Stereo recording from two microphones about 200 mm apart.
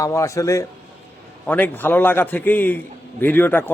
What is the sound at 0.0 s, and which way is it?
A man's voice, 15° left (ahead or behind).